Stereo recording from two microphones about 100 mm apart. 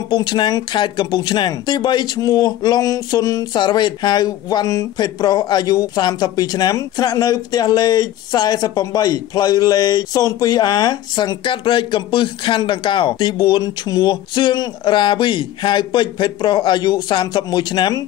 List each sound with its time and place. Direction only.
0.1 s speech: 50° left (ahead or behind)
3.5 s speech: 50° left (ahead or behind)